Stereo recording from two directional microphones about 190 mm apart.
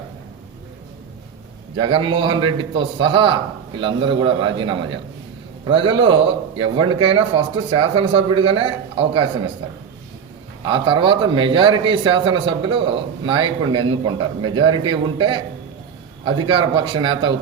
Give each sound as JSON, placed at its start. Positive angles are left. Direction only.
{"t": 1.8, "sound": "a man's voice", "side_deg": -25}
{"t": 10.7, "sound": "a man's voice", "side_deg": -25}